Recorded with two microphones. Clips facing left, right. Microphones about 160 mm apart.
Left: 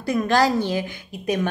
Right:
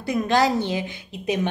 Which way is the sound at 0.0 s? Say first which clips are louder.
Left 1 dB; 20° right (ahead or behind).